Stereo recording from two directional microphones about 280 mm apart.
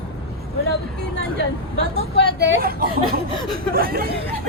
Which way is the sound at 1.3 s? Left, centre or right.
Left.